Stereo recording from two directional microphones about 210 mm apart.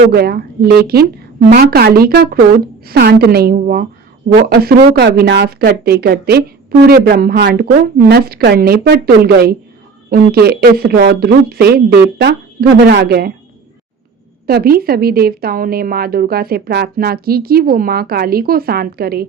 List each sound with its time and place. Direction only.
0.1 s speech: 50° right (ahead or behind)
14.4 s speech: 45° right (ahead or behind)